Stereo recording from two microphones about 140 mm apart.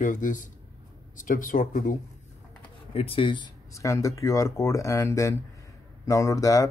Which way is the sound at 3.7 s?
20° left (ahead or behind).